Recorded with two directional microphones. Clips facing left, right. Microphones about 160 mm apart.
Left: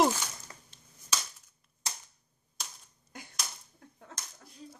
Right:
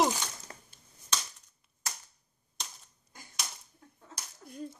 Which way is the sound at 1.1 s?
10° left (ahead or behind).